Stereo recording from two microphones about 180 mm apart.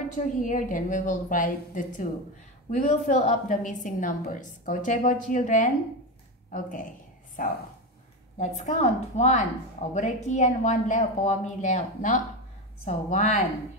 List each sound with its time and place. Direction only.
0.1 s a woman's voice: 45° left (ahead or behind)
7.4 s a woman's voice: 50° left (ahead or behind)